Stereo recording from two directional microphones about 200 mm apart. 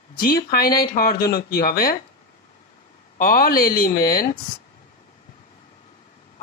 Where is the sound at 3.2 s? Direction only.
45° left (ahead or behind).